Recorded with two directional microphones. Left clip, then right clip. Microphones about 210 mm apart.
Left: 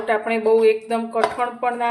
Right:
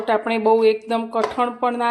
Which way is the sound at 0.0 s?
30° right (ahead or behind).